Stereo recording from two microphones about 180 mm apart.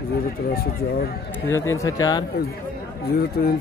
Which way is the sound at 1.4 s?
15° left (ahead or behind).